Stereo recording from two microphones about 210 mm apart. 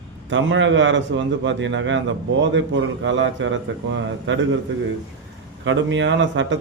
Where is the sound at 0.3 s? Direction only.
60° right (ahead or behind).